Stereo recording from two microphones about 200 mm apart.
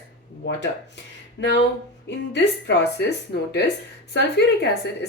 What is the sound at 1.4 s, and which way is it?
A woman's voice, 60° left (ahead or behind).